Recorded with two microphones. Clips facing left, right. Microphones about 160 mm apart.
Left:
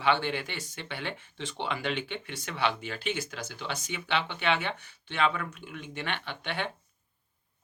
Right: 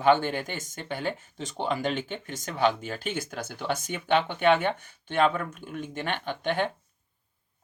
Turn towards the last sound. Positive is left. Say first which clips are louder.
# right 7 dB
turn(degrees=-45)  # may be behind; listen again after turning